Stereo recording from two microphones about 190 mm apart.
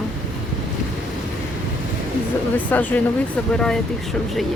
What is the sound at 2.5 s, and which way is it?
Speech, 10° left (ahead or behind).